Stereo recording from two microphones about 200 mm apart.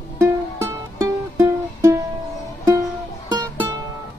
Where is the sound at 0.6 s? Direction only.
15° right (ahead or behind).